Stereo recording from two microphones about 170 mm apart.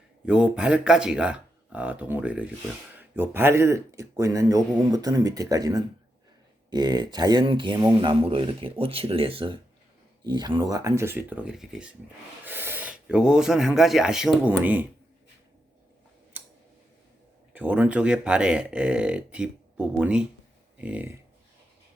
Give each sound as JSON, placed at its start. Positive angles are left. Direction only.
{"t": 0.3, "sound": "speech", "side_deg": -5}
{"t": 16.4, "sound": "a sound", "side_deg": -10}
{"t": 17.5, "sound": "speech", "side_deg": -10}